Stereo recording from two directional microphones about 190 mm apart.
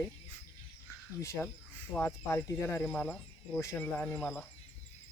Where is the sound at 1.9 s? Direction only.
10° left (ahead or behind).